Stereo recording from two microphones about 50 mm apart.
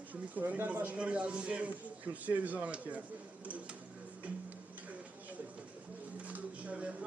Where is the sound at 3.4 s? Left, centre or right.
Right.